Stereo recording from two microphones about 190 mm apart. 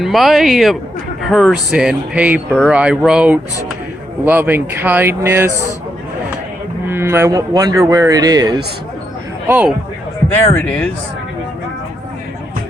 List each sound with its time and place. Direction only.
0.0 s speech: centre (ahead or behind)
6.8 s speech: 10° right (ahead or behind)
9.5 s speech: 5° right (ahead or behind)
10.3 s speech: 5° left (ahead or behind)